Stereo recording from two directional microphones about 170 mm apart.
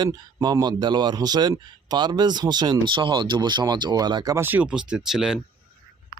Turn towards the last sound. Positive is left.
turn(degrees=-5)  # may be behind; listen again after turning